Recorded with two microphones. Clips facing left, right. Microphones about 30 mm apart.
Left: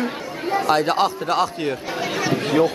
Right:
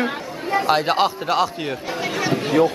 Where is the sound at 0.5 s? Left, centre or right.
Centre.